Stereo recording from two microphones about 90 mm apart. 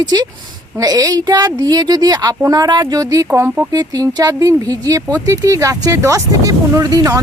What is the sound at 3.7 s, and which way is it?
A woman's voice, 45° right (ahead or behind).